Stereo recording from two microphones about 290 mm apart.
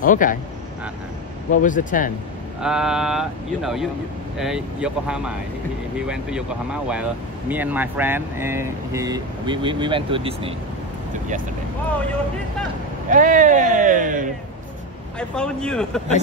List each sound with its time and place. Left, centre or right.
0.0 s speech: left
1.5 s speech: left
2.6 s speech: centre
13.1 s speech: right
15.1 s speech: centre